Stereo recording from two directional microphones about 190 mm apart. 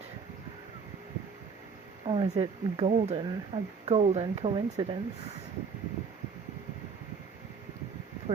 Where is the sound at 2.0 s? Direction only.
30° right (ahead or behind).